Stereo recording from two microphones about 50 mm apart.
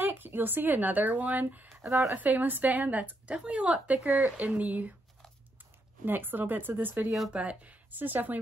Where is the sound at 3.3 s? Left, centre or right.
Right.